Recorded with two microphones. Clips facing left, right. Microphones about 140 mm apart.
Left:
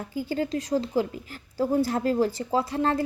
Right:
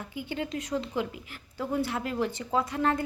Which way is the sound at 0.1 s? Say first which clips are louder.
Left 6 dB; 35° left (ahead or behind).